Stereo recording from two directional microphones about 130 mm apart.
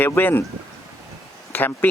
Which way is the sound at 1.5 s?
15° left (ahead or behind).